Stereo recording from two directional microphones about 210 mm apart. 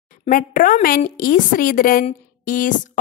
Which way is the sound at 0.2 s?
40° left (ahead or behind).